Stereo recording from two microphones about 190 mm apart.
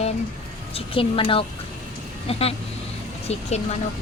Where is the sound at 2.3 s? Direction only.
30° left (ahead or behind).